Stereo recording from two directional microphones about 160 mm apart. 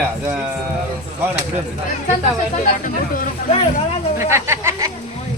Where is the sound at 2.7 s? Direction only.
55° left (ahead or behind).